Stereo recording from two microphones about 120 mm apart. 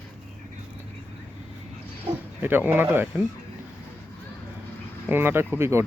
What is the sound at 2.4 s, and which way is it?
Speech, 15° right (ahead or behind).